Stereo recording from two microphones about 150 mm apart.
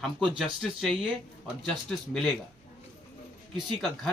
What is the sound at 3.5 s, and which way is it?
Speech, centre (ahead or behind).